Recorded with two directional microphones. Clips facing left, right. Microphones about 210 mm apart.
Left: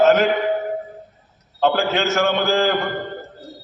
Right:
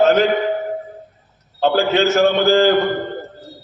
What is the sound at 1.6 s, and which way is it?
A man's voice, 35° right (ahead or behind).